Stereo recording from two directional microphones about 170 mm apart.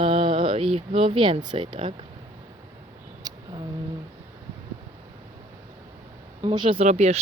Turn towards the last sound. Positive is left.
turn(degrees=-40)  # may be behind; listen again after turning